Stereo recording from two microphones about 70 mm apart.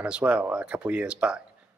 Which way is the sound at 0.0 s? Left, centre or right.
Centre.